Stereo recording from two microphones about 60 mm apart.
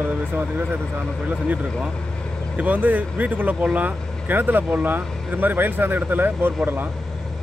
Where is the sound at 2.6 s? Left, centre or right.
Right.